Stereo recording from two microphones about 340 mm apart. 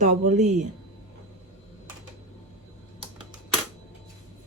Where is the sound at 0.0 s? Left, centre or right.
Right.